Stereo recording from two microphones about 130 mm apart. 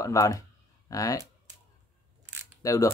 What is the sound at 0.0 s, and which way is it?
Speech, 25° left (ahead or behind).